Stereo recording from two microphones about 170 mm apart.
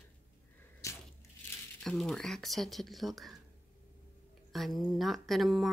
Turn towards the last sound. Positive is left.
turn(degrees=0)  # may be behind; listen again after turning